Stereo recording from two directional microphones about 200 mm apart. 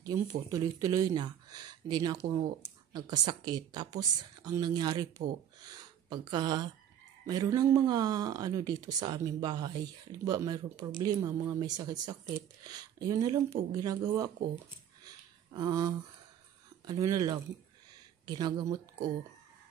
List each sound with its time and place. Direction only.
0.0 s speech: 15° right (ahead or behind)
15.0 s a sound: 20° right (ahead or behind)
16.8 s speech: 20° right (ahead or behind)